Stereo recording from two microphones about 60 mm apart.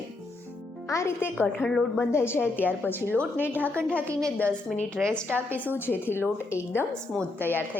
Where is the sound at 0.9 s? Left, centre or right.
Left.